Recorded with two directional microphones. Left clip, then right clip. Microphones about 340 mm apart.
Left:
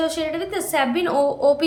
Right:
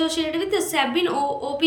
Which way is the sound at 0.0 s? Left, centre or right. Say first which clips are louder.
Even; centre.